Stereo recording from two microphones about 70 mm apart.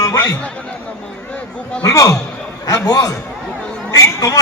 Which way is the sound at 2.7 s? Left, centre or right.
Left.